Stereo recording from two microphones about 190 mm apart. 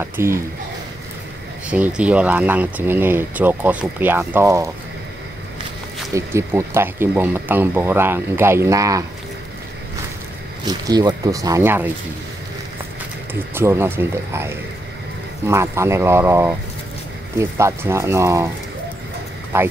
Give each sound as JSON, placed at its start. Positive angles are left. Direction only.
{"t": 0.0, "sound": "speech", "side_deg": -15}
{"t": 1.7, "sound": "speech", "side_deg": -5}
{"t": 6.1, "sound": "speech", "side_deg": -15}
{"t": 10.6, "sound": "speech", "side_deg": -20}
{"t": 13.3, "sound": "speech", "side_deg": -10}
{"t": 19.5, "sound": "speech", "side_deg": -10}